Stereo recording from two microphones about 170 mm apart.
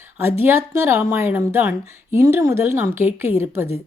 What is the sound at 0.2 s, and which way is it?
Speech, 15° right (ahead or behind).